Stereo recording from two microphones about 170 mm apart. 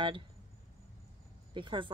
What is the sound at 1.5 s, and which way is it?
Speech, 30° right (ahead or behind).